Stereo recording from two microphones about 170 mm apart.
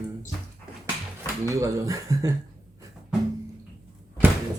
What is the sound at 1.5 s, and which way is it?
Speech, 20° right (ahead or behind).